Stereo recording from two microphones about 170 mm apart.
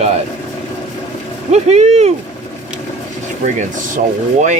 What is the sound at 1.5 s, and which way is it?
Speech, 40° right (ahead or behind).